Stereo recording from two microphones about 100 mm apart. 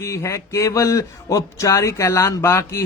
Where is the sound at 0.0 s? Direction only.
30° left (ahead or behind).